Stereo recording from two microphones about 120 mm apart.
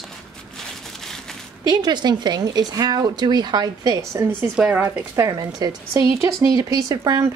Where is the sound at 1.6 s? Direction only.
35° right (ahead or behind).